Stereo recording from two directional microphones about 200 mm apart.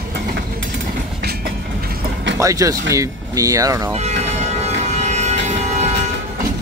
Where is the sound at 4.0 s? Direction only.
35° right (ahead or behind).